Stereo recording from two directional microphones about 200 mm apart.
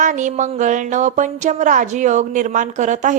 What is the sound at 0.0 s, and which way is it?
A woman's voice, 40° right (ahead or behind).